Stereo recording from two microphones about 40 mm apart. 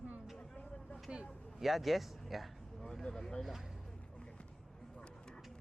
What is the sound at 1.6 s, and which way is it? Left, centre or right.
Speech, centre.